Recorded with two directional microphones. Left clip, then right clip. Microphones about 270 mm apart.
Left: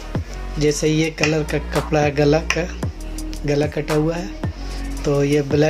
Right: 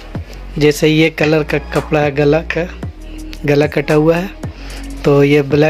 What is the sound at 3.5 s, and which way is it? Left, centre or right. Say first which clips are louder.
Speech: right 8 dB; right.